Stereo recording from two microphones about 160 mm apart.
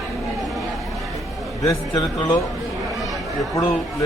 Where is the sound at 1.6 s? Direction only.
20° left (ahead or behind).